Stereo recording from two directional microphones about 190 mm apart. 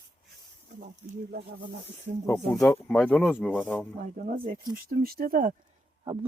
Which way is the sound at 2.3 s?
5° left (ahead or behind).